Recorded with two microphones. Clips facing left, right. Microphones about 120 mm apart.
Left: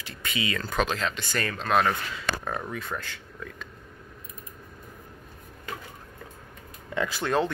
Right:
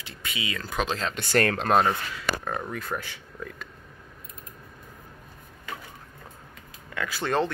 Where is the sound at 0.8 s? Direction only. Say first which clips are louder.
Even; 35° right (ahead or behind).